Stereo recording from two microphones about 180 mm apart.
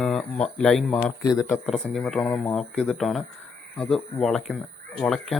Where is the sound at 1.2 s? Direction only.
20° left (ahead or behind).